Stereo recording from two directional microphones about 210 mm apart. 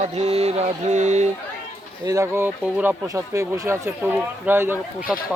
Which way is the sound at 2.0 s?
15° right (ahead or behind).